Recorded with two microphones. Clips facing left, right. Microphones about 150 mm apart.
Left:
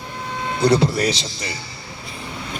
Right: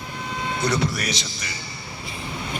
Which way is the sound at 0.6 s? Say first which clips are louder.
Left 9 dB; 30° left (ahead or behind).